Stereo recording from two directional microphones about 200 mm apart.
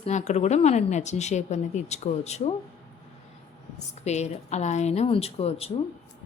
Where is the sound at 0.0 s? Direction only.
35° left (ahead or behind).